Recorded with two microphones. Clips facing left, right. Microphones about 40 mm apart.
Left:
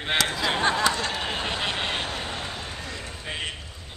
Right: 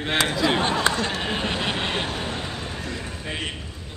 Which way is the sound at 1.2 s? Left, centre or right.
Centre.